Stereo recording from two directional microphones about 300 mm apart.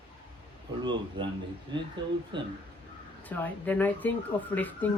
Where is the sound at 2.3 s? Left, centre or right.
Centre.